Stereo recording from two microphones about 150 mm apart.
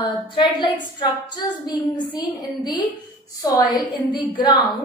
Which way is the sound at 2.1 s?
30° left (ahead or behind).